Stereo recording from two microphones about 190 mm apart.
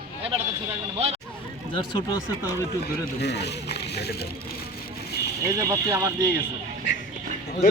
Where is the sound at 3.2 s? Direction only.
60° left (ahead or behind).